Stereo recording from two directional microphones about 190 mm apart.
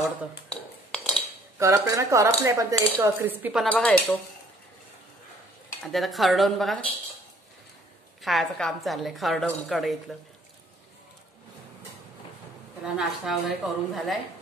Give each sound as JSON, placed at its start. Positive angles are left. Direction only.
{"t": 0.5, "sound": "cutlery", "side_deg": 5}
{"t": 1.6, "sound": "cutlery", "side_deg": -15}
{"t": 3.6, "sound": "dishes", "side_deg": 5}
{"t": 5.8, "sound": "a woman's voice", "side_deg": 0}
{"t": 8.2, "sound": "a woman's voice", "side_deg": 0}
{"t": 12.9, "sound": "a woman's voice", "side_deg": 0}